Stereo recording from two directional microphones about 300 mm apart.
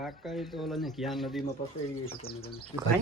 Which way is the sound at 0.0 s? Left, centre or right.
Centre.